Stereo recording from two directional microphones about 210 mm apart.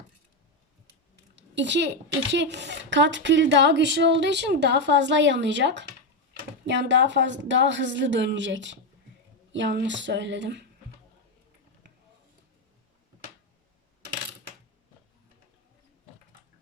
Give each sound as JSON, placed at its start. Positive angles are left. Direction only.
{"t": 1.4, "sound": "a woman's voice", "side_deg": -55}